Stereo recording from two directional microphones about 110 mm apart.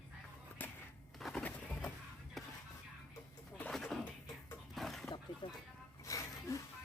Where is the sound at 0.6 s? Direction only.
20° left (ahead or behind).